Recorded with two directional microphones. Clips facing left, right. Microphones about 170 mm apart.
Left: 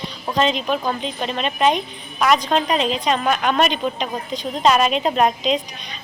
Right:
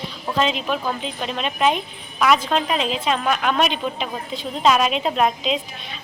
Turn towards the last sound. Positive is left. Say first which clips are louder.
# left 2 dB
turn(degrees=0)  # may be behind; listen again after turning